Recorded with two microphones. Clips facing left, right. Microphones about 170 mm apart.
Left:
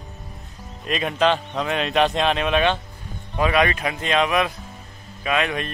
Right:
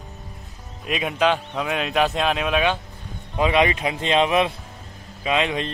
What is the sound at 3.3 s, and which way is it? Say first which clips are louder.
Speech: right 1 dB; 20° right (ahead or behind).